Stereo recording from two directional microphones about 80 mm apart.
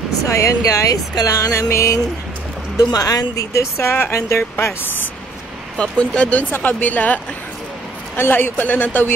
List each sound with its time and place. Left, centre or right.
0.2 s speech: left
2.8 s speech: left
3.7 s speech: left
5.8 s speech: centre
8.2 s speech: left